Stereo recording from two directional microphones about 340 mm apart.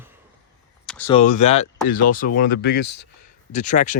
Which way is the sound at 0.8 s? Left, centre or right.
Centre.